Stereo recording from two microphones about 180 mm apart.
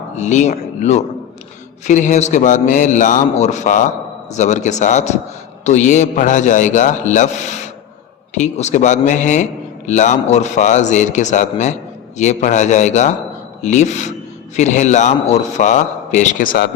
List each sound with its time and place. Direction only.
0.2 s a man's voice: 40° left (ahead or behind)